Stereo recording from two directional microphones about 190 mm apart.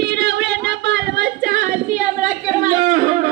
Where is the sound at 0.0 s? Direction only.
60° right (ahead or behind); by 1.8 s 45° right (ahead or behind).